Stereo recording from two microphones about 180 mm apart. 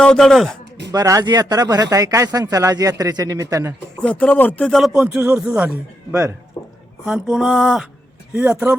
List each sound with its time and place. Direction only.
0.0 s speech: 5° left (ahead or behind)
0.9 s speech: 20° right (ahead or behind)
4.0 s speech: 5° left (ahead or behind)